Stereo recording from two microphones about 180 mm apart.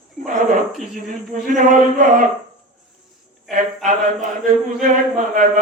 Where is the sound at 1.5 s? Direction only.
45° right (ahead or behind).